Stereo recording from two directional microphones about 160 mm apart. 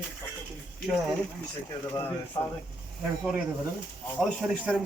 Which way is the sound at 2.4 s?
25° left (ahead or behind).